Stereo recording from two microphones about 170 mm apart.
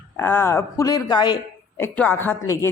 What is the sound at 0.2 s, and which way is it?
Speech, 15° left (ahead or behind).